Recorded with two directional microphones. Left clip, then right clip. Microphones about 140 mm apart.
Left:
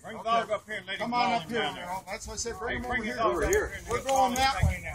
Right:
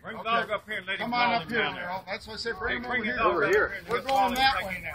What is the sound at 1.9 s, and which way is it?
Speech, 10° left (ahead or behind).